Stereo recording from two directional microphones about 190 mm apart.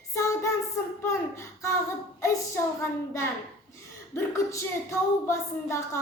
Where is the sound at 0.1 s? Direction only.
15° left (ahead or behind).